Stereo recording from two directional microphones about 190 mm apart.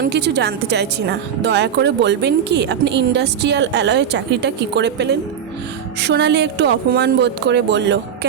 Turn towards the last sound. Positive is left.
turn(degrees=-65)  # may be behind; listen again after turning